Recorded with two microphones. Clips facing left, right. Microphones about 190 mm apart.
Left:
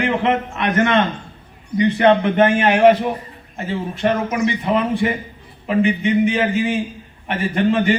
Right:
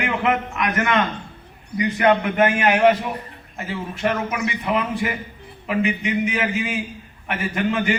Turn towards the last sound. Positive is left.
turn(degrees=30)  # may be behind; listen again after turning